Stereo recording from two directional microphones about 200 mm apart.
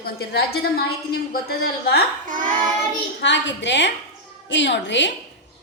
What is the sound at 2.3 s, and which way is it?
Child singing, 40° right (ahead or behind).